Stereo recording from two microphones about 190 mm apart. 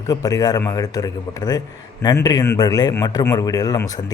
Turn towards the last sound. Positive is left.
turn(degrees=20)  # may be behind; listen again after turning